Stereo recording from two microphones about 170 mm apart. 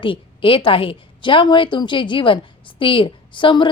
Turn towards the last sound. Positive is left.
turn(degrees=30)  # may be behind; listen again after turning